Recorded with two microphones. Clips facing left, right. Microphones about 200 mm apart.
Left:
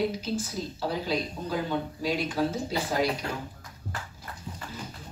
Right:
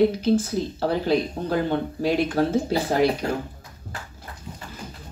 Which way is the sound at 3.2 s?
35° right (ahead or behind).